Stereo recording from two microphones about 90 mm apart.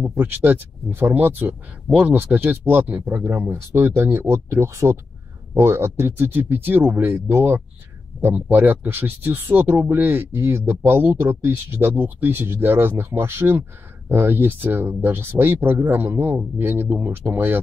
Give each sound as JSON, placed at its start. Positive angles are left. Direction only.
{"t": 0.2, "sound": "speech", "side_deg": -20}
{"t": 1.9, "sound": "speech", "side_deg": -10}
{"t": 2.1, "sound": "speech", "side_deg": -20}